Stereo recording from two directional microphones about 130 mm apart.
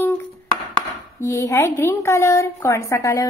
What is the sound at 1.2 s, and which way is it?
A woman's voice, 20° left (ahead or behind).